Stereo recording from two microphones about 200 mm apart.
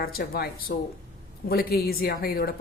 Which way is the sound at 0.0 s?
50° left (ahead or behind).